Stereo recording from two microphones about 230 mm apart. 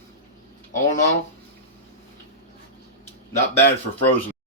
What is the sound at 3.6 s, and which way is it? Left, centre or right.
Speech, centre.